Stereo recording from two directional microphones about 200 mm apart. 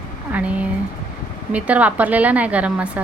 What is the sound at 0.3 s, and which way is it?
A woman's voice, 5° right (ahead or behind).